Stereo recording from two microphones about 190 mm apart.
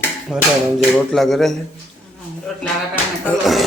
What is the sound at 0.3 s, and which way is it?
Speech, 5° right (ahead or behind).